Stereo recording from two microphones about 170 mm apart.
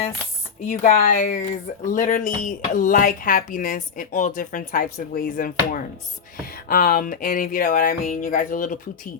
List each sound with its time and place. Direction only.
0.6 s speech: 50° left (ahead or behind)